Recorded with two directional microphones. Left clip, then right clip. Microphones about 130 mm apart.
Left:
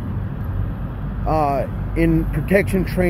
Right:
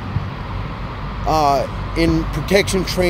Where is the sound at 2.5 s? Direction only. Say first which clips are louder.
Right 2 dB; 90° right.